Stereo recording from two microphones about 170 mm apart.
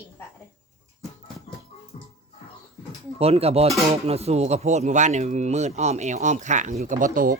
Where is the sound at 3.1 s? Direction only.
35° right (ahead or behind).